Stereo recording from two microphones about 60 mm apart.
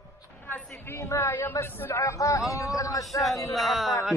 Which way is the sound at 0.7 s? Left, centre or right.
Left.